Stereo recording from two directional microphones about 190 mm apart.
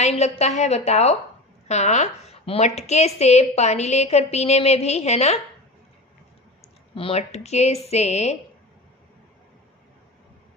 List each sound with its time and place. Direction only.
0.0 s a woman's voice: 35° left (ahead or behind)
7.0 s a woman's voice: 35° left (ahead or behind)